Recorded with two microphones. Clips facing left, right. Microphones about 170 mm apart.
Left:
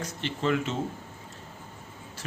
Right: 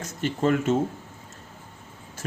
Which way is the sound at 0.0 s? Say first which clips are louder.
Right 5 dB; 45° right (ahead or behind).